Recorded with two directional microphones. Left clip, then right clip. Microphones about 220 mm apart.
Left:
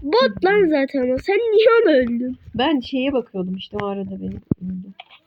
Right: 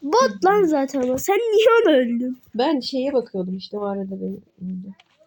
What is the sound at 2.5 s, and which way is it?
Speech, 20° left (ahead or behind).